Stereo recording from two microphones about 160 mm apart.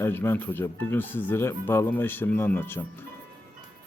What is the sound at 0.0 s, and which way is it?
Speech, 15° left (ahead or behind).